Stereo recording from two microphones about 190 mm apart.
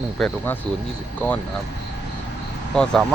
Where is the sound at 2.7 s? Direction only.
5° left (ahead or behind).